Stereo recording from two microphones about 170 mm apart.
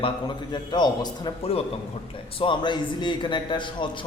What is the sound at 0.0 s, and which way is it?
A man's voice, 25° left (ahead or behind).